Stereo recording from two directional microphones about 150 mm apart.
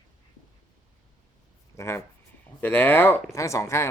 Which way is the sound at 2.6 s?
10° left (ahead or behind).